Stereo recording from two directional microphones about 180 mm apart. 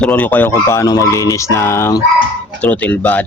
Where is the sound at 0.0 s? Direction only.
5° left (ahead or behind).